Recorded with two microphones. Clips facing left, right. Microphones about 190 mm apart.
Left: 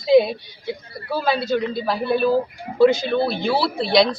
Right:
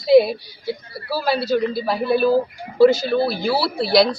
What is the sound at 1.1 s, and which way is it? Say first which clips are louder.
Speech: right 1 dB; 5° right (ahead or behind).